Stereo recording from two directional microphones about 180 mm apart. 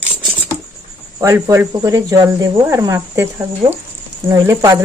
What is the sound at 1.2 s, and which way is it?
Speech, 15° right (ahead or behind).